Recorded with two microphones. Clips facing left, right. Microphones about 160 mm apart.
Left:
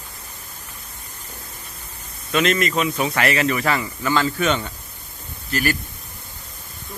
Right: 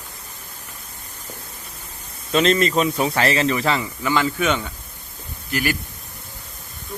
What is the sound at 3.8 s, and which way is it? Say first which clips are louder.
Speech: even; 10° right (ahead or behind).